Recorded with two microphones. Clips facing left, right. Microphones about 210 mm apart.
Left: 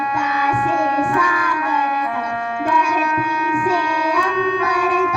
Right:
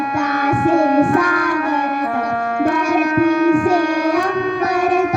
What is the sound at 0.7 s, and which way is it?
Music, 40° right (ahead or behind).